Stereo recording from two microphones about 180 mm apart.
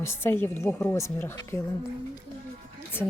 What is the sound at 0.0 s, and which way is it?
Speech, 15° left (ahead or behind).